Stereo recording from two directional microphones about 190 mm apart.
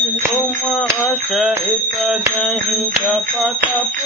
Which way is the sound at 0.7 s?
Centre (ahead or behind).